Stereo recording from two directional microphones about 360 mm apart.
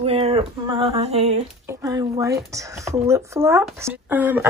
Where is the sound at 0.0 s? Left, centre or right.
Centre.